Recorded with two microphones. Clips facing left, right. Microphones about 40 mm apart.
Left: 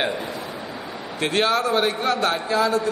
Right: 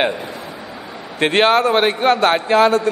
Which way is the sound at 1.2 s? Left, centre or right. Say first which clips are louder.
Right 7 dB; right.